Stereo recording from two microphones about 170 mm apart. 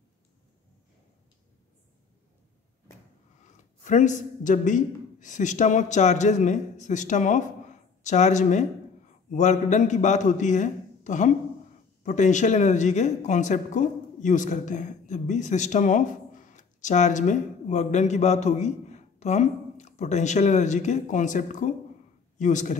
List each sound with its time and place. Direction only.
3.8 s a man's voice: 45° left (ahead or behind)